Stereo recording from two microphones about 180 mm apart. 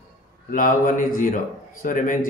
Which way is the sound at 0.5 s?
50° left (ahead or behind).